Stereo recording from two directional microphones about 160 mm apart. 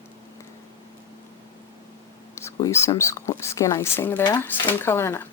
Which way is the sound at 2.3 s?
15° left (ahead or behind).